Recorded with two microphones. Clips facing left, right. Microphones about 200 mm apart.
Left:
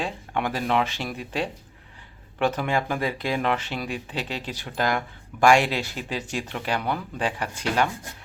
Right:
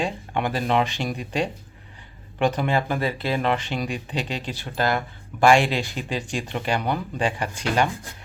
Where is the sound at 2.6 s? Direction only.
10° left (ahead or behind).